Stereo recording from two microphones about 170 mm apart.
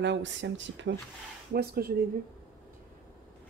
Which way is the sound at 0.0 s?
90° right.